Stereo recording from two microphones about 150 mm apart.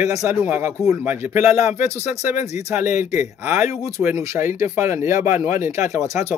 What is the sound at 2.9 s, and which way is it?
Speech, 15° right (ahead or behind).